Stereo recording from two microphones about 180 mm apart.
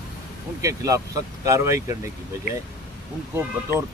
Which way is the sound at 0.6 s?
20° right (ahead or behind).